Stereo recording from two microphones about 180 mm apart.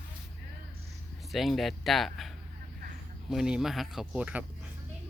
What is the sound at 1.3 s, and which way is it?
Speech, centre (ahead or behind).